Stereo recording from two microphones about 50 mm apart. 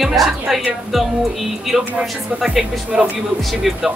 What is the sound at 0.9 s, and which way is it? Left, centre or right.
Music, centre.